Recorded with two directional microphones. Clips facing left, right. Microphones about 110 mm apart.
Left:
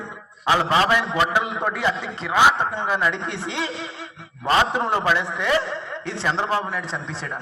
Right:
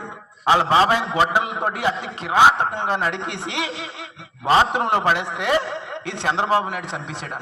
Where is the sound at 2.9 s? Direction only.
55° right (ahead or behind).